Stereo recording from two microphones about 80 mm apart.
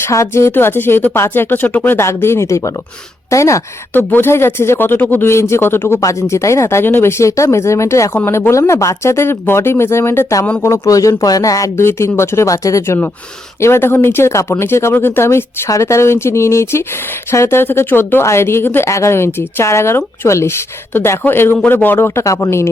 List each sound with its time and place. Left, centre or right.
0.0 s speech: left
3.9 s speech: left
5.3 s speech: left
6.0 s speech: left
11.8 s speech: left
13.6 s speech: left